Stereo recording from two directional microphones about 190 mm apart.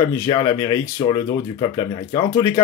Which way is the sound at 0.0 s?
15° left (ahead or behind).